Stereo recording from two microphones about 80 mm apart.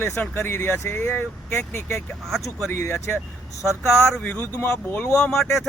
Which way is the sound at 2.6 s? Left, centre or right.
Left.